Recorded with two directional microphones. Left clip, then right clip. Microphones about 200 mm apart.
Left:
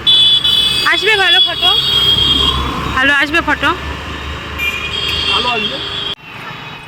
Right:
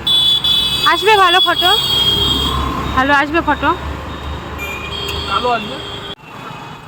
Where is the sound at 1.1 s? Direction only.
35° right (ahead or behind).